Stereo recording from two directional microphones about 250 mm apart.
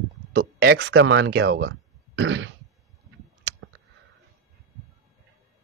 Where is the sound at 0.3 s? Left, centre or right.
Right.